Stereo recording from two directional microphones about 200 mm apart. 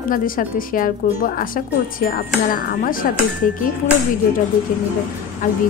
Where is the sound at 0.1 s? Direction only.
45° left (ahead or behind).